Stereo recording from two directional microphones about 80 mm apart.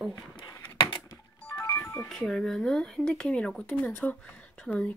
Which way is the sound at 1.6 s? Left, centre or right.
Left.